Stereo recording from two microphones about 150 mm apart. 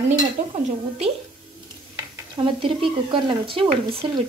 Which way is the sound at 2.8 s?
35° right (ahead or behind).